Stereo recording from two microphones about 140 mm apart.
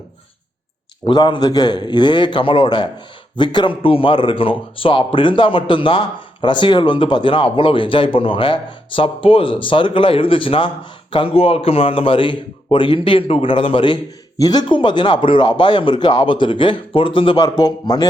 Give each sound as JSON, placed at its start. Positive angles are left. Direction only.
{"t": 1.0, "sound": "a man's voice", "side_deg": 35}